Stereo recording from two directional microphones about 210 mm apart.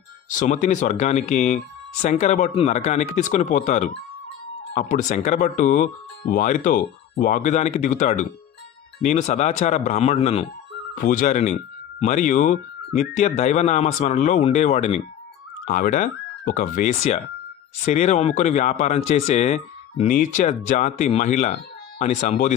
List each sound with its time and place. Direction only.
0.3 s speech: 35° left (ahead or behind)